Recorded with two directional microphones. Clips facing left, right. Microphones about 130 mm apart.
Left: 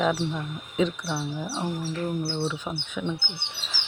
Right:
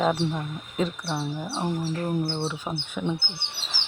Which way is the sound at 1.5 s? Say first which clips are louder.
Right 4 dB; 25° right (ahead or behind).